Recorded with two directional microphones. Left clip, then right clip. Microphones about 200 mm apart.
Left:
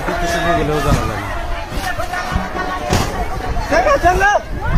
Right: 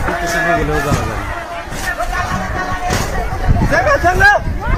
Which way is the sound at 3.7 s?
Centre (ahead or behind).